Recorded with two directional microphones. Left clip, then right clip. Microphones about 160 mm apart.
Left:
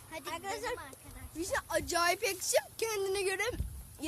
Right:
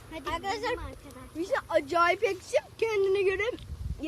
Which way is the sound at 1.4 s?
10° left (ahead or behind).